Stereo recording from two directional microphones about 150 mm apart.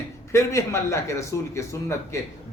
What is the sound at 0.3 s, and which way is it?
A man's voice, 20° left (ahead or behind).